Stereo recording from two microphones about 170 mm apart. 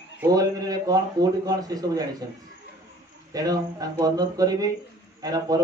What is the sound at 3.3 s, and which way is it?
A man's voice, 20° right (ahead or behind).